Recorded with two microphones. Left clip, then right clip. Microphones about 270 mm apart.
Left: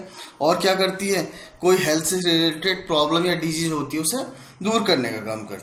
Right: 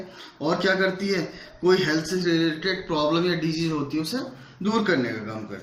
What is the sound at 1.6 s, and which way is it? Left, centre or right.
Speech, left.